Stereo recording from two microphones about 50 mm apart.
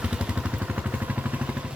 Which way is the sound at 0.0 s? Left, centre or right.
Right.